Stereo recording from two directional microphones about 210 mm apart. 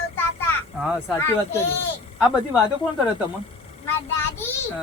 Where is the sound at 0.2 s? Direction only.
10° left (ahead or behind).